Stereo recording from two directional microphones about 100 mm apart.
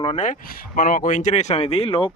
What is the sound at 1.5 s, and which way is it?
Speech, 90° left.